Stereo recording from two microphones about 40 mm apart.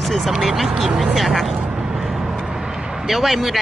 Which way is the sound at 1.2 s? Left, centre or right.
Centre.